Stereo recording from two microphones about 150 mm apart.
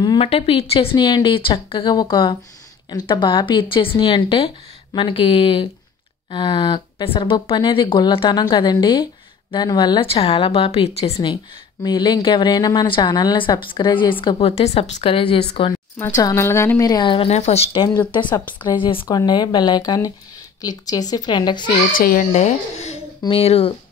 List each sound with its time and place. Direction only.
0.2 s speech: 40° left (ahead or behind)
11.2 s speech: 30° left (ahead or behind)
16.0 s speech: 20° left (ahead or behind); by 17.8 s 45° left (ahead or behind)
18.1 s speech: 30° left (ahead or behind)
21.9 s a child's voice: 70° left (ahead or behind)
22.3 s speech: 50° left (ahead or behind)